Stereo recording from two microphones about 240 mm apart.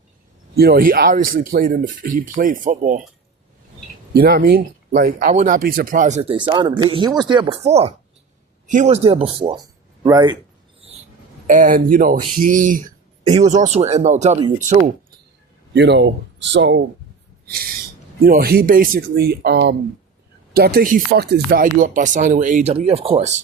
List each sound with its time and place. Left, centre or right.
0.5 s speech: right
4.1 s speech: right; by 10.3 s centre
11.4 s speech: right
15.7 s speech: right
17.4 s owl: right
18.2 s speech: right